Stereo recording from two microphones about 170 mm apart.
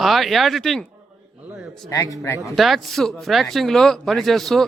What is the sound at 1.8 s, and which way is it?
Speech, 20° left (ahead or behind).